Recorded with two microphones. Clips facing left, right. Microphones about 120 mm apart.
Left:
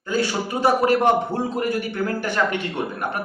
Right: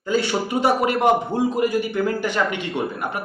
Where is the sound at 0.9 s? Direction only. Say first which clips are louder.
Even; 15° right (ahead or behind).